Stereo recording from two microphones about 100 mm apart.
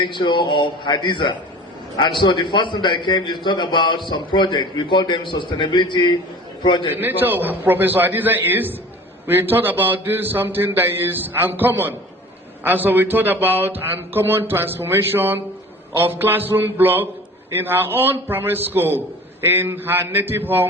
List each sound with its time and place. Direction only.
0.0 s a man's voice: 50° left (ahead or behind)
6.9 s a man's voice: 20° right (ahead or behind)